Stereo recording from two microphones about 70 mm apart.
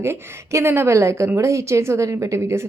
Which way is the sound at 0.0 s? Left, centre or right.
Right.